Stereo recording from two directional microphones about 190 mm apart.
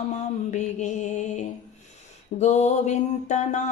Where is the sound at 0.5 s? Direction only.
40° left (ahead or behind).